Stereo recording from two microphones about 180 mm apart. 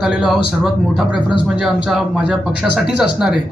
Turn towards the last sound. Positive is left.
turn(degrees=-5)  # may be behind; listen again after turning